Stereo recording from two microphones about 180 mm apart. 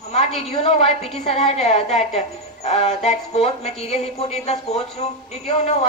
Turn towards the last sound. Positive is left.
turn(degrees=35)  # may be behind; listen again after turning